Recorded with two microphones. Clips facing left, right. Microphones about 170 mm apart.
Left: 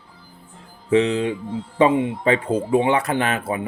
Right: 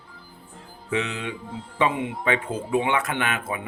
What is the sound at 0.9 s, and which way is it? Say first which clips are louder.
Speech: left 10 dB; 35° left (ahead or behind).